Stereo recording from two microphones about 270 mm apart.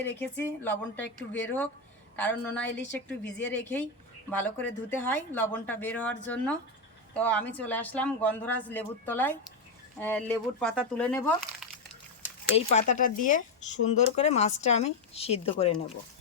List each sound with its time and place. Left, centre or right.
0.0 s speech: centre
12.5 s a woman's voice: left